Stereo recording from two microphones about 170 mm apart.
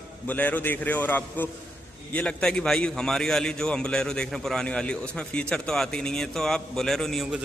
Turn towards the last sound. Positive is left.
turn(degrees=0)  # may be behind; listen again after turning